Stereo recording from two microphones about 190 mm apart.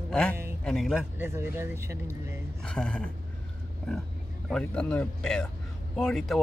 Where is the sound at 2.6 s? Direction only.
5° left (ahead or behind).